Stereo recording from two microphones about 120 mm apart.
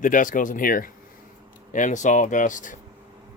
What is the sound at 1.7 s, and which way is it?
Speech, 90° left.